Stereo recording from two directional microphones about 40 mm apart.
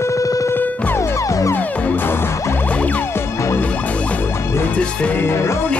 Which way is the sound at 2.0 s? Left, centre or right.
Left.